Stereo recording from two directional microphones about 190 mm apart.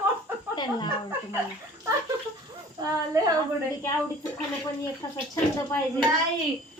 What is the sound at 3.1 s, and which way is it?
Speech, 15° right (ahead or behind).